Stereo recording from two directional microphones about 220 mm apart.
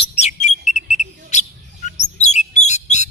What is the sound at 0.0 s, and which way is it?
Bird, 30° left (ahead or behind).